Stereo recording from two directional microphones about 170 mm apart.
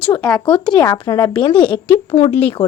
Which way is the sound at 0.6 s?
25° left (ahead or behind).